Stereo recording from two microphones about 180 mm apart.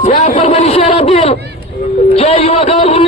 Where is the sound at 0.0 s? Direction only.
45° left (ahead or behind).